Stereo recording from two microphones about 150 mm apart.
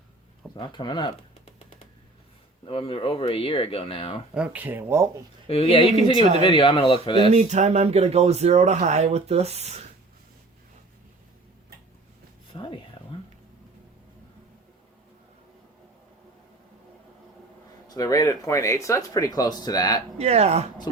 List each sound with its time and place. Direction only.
0.5 s speech: 30° left (ahead or behind)
2.6 s speech: 35° left (ahead or behind)
4.4 s speech: 10° right (ahead or behind)
5.5 s speech: 40° left (ahead or behind)
7.2 s speech: 50° right (ahead or behind)
12.5 s a sound: 35° left (ahead or behind)
17.8 s speech: 25° left (ahead or behind)
20.1 s speech: 45° right (ahead or behind)
20.9 s speech: 25° left (ahead or behind)